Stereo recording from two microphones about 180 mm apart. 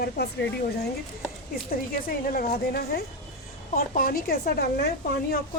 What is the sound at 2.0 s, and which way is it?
Speech, 50° left (ahead or behind).